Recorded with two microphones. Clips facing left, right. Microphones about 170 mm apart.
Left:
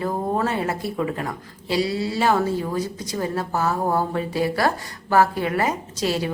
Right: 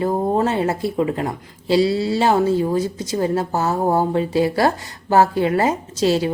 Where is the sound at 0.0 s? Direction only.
25° right (ahead or behind).